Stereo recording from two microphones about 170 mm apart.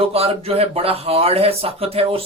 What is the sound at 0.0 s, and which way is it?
Speech, 35° right (ahead or behind).